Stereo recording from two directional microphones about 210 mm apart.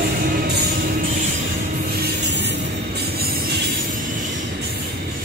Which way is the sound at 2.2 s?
55° right (ahead or behind).